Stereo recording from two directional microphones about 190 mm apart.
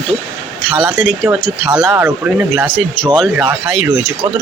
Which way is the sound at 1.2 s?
5° right (ahead or behind).